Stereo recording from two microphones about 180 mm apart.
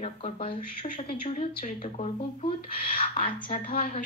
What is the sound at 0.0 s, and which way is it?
Speech, 35° left (ahead or behind).